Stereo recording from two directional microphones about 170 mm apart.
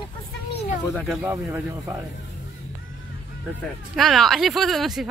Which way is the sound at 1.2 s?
15° right (ahead or behind).